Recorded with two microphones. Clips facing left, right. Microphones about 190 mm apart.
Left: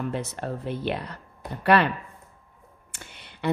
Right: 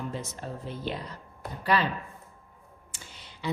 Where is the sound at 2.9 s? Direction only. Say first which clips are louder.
Left 3 dB; 60° left (ahead or behind).